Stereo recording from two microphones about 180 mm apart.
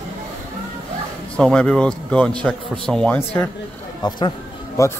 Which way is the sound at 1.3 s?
5° left (ahead or behind).